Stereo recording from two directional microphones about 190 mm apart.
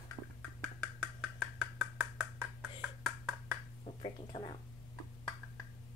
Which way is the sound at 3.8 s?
25° left (ahead or behind).